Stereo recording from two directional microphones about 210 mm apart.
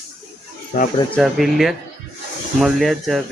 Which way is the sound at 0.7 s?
40° left (ahead or behind).